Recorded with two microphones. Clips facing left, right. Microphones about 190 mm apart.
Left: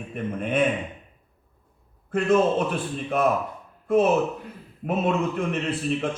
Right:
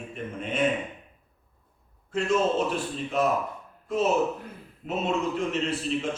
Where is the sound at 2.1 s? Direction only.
55° left (ahead or behind).